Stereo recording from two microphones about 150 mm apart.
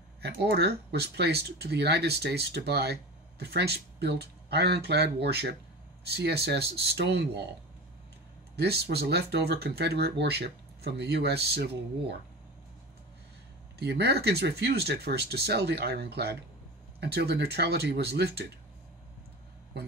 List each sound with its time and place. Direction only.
0.2 s speech: 90° right
8.5 s speech: 90° right
13.7 s speech: 90° right